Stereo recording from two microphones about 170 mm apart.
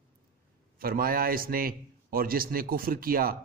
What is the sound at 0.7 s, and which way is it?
A man's voice, 60° right (ahead or behind).